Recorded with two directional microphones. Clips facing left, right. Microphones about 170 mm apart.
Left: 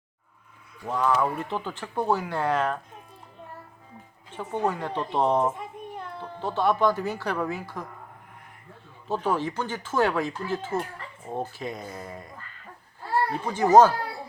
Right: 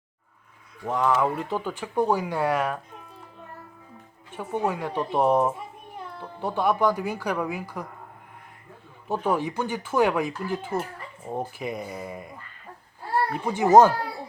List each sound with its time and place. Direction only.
0.9 s speech: 15° right (ahead or behind)
4.3 s speech: 10° right (ahead or behind)
9.0 s speech: 15° right (ahead or behind)
13.4 s speech: 15° right (ahead or behind)